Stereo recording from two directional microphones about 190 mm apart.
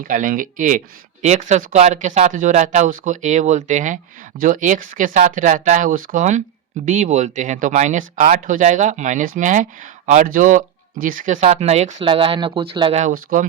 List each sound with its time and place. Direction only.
0.0 s speech: 45° right (ahead or behind); by 13.0 s 25° right (ahead or behind)
13.0 s speech: 45° right (ahead or behind)